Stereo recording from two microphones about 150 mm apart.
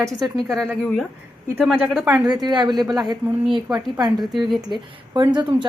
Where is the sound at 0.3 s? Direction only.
Centre (ahead or behind).